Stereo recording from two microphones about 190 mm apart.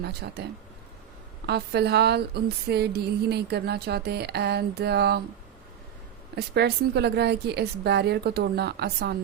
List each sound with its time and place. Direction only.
0.0 s a woman's voice: 55° right (ahead or behind)
1.5 s a woman's voice: 60° right (ahead or behind)
6.3 s a woman's voice: 60° right (ahead or behind)